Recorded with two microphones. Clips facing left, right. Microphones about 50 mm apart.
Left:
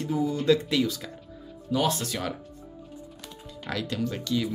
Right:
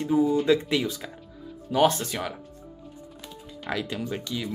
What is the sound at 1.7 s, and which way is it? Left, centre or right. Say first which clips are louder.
Speech: right 4 dB; right.